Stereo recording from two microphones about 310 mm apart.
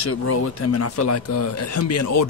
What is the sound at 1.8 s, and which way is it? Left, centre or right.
Speech, left.